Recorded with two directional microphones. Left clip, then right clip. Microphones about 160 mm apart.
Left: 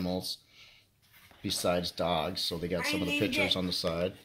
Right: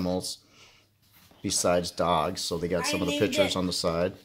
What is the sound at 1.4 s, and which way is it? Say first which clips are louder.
Speech: right 5 dB; 5° right (ahead or behind).